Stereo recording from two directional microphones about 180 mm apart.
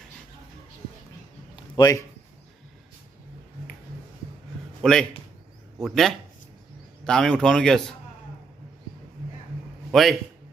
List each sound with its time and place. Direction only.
1.5 s a sound: 20° left (ahead or behind)
4.8 s a man's voice: centre (ahead or behind)
9.9 s a man's voice: centre (ahead or behind)